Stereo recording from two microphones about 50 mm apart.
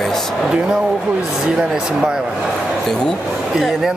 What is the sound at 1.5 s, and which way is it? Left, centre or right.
Speech, centre.